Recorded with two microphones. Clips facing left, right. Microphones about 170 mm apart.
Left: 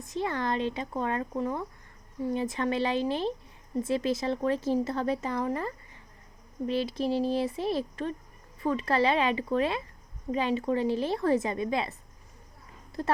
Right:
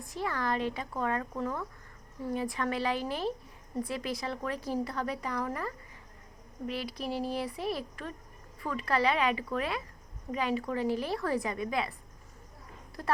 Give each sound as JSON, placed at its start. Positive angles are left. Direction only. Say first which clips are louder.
{"t": 0.0, "sound": "speech", "louder": "left 3 dB", "side_deg": 20}
{"t": 13.0, "sound": "speech", "louder": "left 3 dB", "side_deg": 25}